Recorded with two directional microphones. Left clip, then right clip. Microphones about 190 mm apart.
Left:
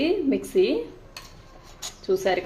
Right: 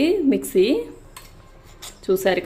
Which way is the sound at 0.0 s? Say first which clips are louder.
Right 4 dB; 35° right (ahead or behind).